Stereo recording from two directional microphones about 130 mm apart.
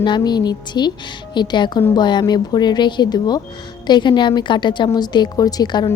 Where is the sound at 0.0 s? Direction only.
35° left (ahead or behind).